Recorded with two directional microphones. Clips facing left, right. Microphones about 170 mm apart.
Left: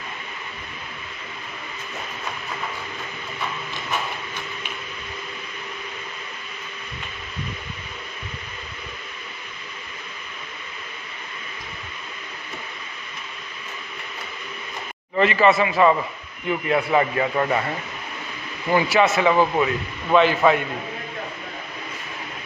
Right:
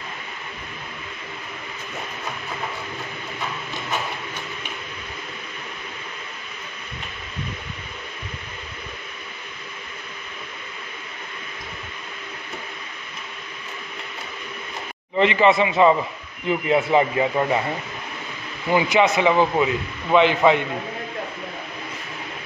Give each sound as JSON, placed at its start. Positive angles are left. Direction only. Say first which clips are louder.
{"t": 15.1, "sound": "speech", "louder": "even", "side_deg": -20}
{"t": 18.7, "sound": "speech", "louder": "even", "side_deg": -15}